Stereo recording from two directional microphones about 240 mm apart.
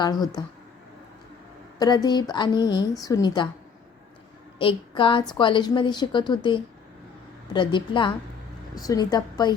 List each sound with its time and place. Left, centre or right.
0.0 s a woman's voice: centre
1.8 s a woman's voice: centre
4.5 s a sound: left
5.3 s a woman's voice: centre